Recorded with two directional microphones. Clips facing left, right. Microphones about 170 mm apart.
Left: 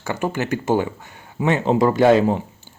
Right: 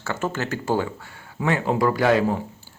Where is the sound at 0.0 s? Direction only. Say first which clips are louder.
Left 3 dB; 15° left (ahead or behind).